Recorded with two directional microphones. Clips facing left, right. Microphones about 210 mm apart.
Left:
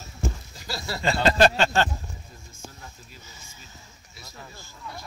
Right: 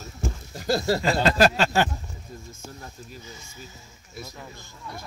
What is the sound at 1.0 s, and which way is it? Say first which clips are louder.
Speech: left 3 dB; 5° right (ahead or behind).